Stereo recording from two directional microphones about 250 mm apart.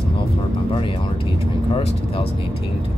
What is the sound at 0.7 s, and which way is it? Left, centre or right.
Music, left.